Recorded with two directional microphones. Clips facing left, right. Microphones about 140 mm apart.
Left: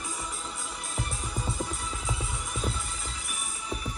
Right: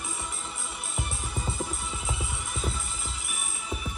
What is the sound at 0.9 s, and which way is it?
Music, centre (ahead or behind).